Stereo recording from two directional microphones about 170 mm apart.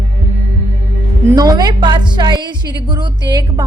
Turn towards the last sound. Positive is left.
turn(degrees=-25)  # may be behind; listen again after turning